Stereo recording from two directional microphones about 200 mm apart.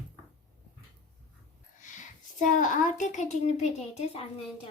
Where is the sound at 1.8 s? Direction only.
40° left (ahead or behind).